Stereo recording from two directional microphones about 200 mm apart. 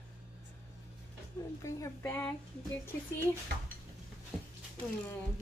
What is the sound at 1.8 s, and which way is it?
Speech, 10° left (ahead or behind).